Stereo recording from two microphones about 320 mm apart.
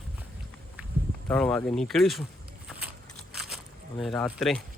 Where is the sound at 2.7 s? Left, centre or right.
Centre.